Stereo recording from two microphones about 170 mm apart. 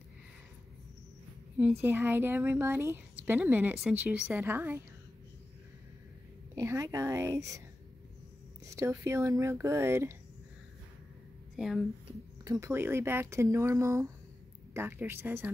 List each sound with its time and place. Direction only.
1.8 s a woman's voice: 15° right (ahead or behind)
6.5 s a woman's voice: 15° right (ahead or behind)
8.6 s a woman's voice: 15° right (ahead or behind)
11.5 s speech: 5° right (ahead or behind)
12.4 s a woman's voice: 15° right (ahead or behind)